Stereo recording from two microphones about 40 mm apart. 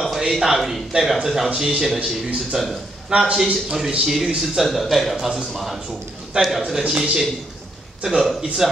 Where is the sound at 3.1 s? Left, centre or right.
Right.